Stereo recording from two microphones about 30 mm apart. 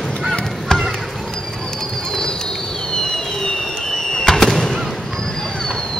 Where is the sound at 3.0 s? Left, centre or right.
Left.